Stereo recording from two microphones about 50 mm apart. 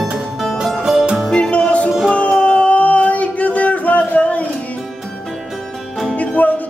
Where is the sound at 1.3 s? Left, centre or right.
Left.